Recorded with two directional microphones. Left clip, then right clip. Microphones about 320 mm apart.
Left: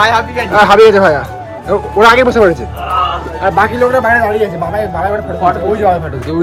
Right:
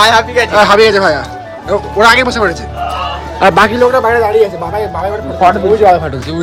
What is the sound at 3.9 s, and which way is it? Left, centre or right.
Speech, centre.